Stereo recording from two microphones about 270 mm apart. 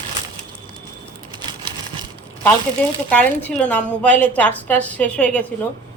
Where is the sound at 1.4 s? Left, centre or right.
Centre.